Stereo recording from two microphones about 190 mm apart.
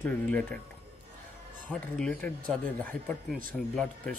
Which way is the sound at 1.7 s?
5° left (ahead or behind).